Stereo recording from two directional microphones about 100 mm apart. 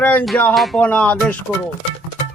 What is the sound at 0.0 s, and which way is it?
Speech, 15° left (ahead or behind).